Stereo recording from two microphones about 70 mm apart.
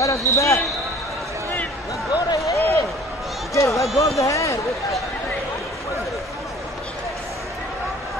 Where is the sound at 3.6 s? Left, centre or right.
Left.